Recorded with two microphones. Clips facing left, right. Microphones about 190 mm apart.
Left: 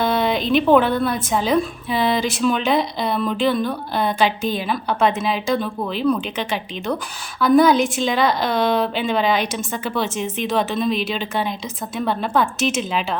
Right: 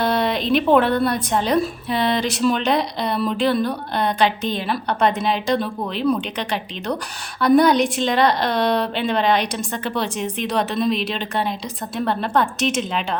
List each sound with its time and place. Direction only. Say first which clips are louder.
0.0 s a woman's voice: left 1 dB; centre (ahead or behind)